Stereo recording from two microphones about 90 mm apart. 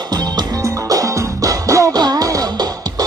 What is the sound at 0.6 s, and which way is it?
Music, 40° right (ahead or behind).